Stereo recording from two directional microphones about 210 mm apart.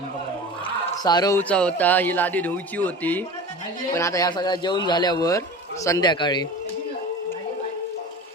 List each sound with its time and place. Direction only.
0.6 s a man's voice: 20° left (ahead or behind)